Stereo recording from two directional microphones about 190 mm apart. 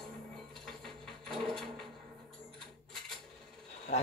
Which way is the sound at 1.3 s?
Centre (ahead or behind).